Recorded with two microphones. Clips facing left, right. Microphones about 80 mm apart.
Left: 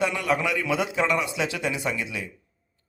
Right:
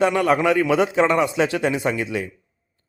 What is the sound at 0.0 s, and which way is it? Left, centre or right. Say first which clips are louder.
A man's voice: right 7 dB; right.